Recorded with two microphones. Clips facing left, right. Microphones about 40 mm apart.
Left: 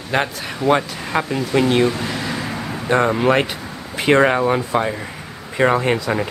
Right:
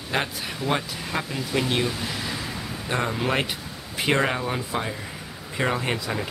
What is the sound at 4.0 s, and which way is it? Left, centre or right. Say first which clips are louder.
Speech: left 9 dB; left.